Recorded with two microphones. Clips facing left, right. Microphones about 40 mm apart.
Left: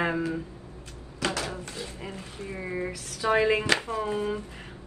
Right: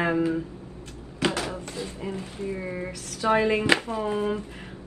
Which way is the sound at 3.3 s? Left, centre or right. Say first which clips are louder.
Even; centre.